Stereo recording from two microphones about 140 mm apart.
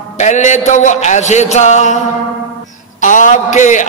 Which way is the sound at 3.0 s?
65° left (ahead or behind).